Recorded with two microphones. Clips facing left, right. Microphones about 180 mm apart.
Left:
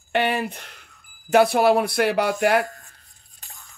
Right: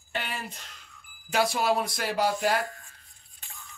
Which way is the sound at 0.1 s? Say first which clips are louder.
Left 12 dB; 65° left (ahead or behind).